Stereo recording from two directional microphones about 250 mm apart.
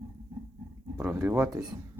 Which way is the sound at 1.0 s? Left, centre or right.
Centre.